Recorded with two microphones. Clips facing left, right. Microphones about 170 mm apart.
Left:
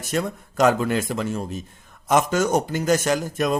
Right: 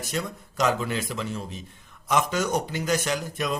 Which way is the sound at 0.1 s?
50° left (ahead or behind).